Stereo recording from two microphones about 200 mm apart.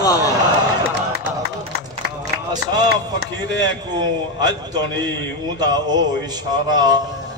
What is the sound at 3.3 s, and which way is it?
Speech, 70° left (ahead or behind).